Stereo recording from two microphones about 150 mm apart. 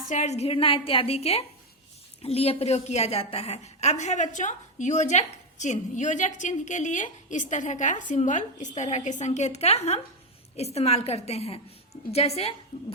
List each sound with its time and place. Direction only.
0.1 s a woman's voice: 50° left (ahead or behind)